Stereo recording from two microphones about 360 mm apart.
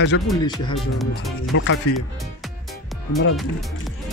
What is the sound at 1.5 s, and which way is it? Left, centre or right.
Speech, left.